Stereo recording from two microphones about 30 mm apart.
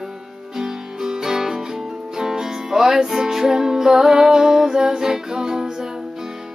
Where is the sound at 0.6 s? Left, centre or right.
Centre.